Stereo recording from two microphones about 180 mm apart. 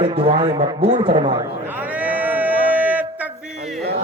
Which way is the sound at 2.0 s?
10° right (ahead or behind).